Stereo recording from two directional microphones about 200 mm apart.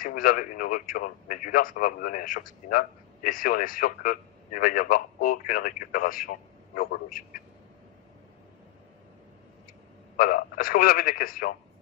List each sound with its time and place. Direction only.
0.0 s speech: 45° left (ahead or behind)
10.1 s speech: 45° left (ahead or behind)